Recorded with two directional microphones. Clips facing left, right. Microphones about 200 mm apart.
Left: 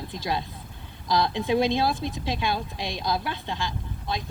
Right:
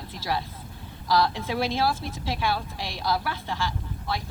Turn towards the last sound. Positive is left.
turn(degrees=20)  # may be behind; listen again after turning